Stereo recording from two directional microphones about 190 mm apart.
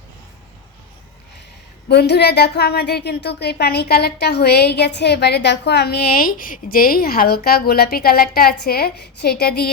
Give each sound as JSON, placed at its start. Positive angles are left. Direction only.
{"t": 1.9, "sound": "a woman's voice", "side_deg": 60}